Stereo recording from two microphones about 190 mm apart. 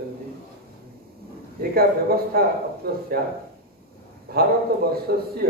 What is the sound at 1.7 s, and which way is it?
A man's voice, 55° right (ahead or behind).